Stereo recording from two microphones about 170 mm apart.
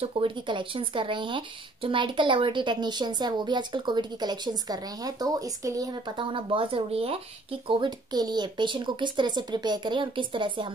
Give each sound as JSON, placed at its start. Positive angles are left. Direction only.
{"t": 0.0, "sound": "speech", "side_deg": -30}